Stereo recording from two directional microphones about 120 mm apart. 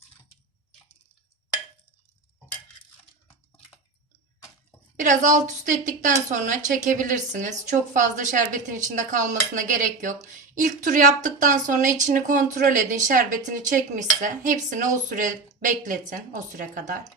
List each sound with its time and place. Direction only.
4.9 s a woman's voice: 90° right